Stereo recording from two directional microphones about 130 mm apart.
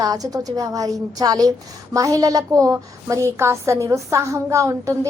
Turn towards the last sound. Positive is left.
turn(degrees=-25)  # may be behind; listen again after turning